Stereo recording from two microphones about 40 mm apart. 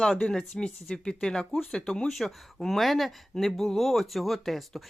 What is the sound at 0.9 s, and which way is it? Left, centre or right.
Speech, centre.